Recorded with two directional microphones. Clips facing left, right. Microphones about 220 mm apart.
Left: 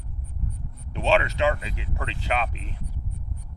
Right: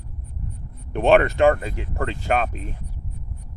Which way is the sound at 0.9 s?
55° right (ahead or behind).